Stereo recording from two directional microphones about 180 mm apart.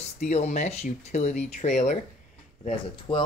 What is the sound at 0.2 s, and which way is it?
Speech, 40° left (ahead or behind).